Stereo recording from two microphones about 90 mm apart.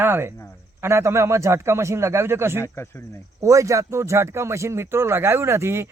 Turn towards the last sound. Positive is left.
turn(degrees=-30)  # may be behind; listen again after turning